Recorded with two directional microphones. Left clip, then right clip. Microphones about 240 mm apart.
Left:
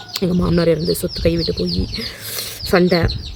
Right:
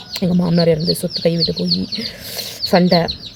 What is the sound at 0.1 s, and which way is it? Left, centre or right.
Speech, centre.